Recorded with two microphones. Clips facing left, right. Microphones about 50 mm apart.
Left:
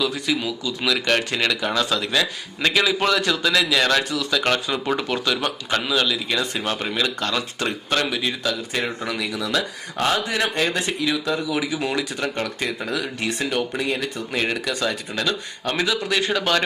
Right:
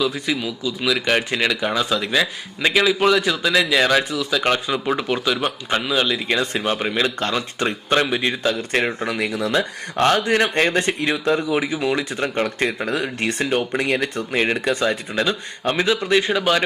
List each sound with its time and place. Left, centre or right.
0.0 s speech: centre; by 8.5 s right
8.7 s speech: right
9.1 s speech: right
10.0 s speech: right
12.5 s speech: right
13.7 s speech: right
14.3 s speech: right